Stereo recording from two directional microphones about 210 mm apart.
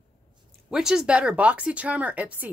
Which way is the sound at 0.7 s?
Centre (ahead or behind).